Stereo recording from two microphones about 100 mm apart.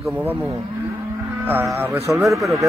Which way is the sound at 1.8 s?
25° right (ahead or behind).